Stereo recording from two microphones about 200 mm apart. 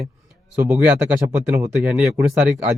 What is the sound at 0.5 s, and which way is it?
Speech, 10° right (ahead or behind).